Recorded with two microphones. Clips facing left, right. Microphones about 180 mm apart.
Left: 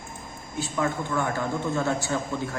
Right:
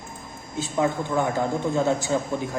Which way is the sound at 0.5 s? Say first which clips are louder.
Right 3 dB; 20° right (ahead or behind).